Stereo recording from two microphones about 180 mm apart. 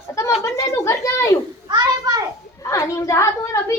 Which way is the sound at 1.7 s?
20° right (ahead or behind).